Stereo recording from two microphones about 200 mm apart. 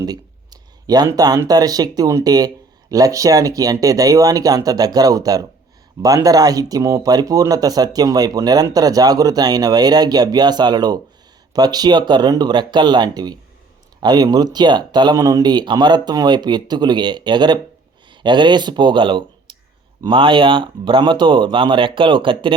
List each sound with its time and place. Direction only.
0.0 s speech: 20° right (ahead or behind)